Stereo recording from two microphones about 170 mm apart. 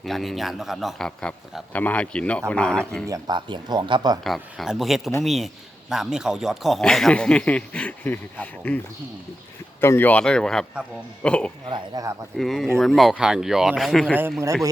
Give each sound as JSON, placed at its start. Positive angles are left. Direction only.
{"t": 0.0, "sound": "speech", "side_deg": 0}
{"t": 3.1, "sound": "speech", "side_deg": -25}
{"t": 4.2, "sound": "speech", "side_deg": 0}
{"t": 9.8, "sound": "a man's voice", "side_deg": 15}
{"t": 11.7, "sound": "speech", "side_deg": -20}
{"t": 12.4, "sound": "speech", "side_deg": 0}